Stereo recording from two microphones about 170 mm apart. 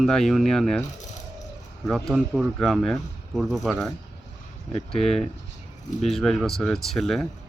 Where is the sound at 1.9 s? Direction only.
Centre (ahead or behind).